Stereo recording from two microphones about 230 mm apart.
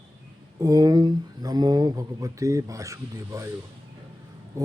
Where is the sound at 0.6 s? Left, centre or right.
Centre.